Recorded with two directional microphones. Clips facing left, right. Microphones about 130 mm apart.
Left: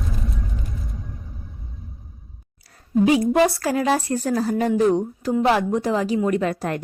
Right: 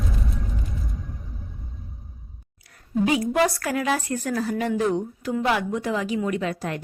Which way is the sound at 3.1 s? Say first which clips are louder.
Left 3 dB; 25° left (ahead or behind).